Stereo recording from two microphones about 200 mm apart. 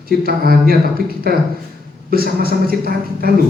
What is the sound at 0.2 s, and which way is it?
A man's voice, 50° right (ahead or behind).